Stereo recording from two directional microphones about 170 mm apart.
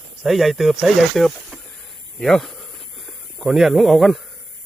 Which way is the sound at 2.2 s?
Centre (ahead or behind).